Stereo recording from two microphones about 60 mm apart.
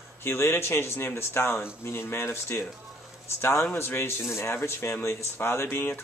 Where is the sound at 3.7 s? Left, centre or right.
Left.